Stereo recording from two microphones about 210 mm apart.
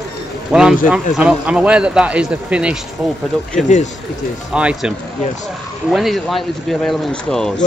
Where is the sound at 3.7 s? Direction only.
35° left (ahead or behind).